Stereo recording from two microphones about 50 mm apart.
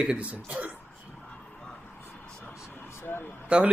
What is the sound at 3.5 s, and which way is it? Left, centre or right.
Speech, right.